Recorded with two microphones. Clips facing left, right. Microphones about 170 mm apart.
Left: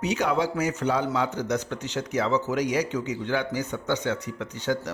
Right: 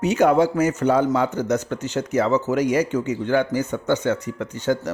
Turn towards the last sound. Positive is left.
turn(degrees=-45)  # may be behind; listen again after turning